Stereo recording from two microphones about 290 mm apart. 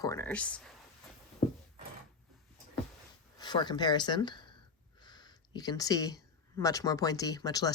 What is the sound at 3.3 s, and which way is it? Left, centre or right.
Speech, centre.